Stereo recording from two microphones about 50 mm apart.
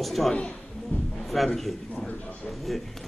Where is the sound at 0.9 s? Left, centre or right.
Left.